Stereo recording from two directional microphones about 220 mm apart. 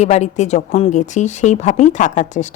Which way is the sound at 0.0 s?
30° left (ahead or behind).